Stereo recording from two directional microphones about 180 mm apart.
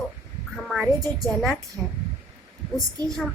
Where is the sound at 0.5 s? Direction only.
Centre (ahead or behind).